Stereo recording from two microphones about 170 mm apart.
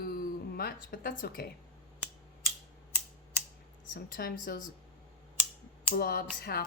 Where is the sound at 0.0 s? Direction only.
60° left (ahead or behind).